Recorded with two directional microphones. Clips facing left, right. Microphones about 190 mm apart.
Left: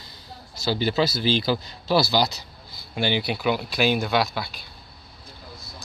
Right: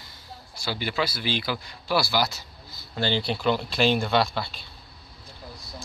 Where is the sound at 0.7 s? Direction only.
30° left (ahead or behind); by 4.5 s 5° left (ahead or behind).